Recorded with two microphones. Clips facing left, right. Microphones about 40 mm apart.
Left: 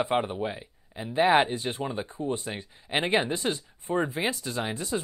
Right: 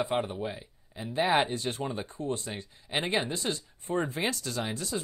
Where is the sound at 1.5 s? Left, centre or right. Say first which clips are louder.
Left 2 dB; left.